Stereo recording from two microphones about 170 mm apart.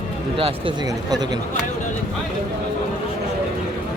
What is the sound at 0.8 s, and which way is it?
Speech, 20° right (ahead or behind).